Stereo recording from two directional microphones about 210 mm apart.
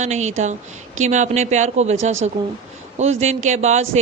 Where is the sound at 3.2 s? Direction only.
30° right (ahead or behind).